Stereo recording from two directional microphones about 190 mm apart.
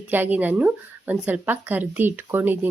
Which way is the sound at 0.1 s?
10° right (ahead or behind).